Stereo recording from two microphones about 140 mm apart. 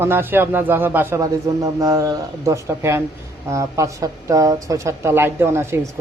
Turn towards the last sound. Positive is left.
turn(degrees=-20)  # may be behind; listen again after turning